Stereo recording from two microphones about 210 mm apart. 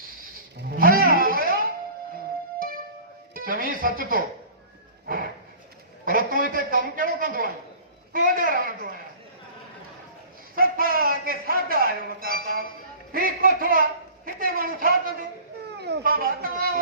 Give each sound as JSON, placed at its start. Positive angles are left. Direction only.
{"t": 0.7, "sound": "music", "side_deg": -45}
{"t": 3.3, "sound": "music", "side_deg": -45}
{"t": 5.0, "sound": "a sound", "side_deg": -45}
{"t": 8.1, "sound": "a woman's voice", "side_deg": -40}
{"t": 10.5, "sound": "a man's voice", "side_deg": -45}